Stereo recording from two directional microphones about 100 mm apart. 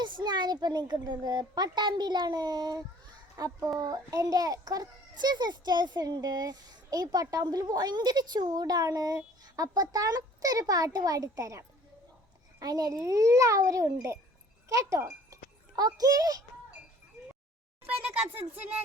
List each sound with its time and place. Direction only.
0.0 s a child's voice: 50° right (ahead or behind)
17.8 s speech: 15° right (ahead or behind)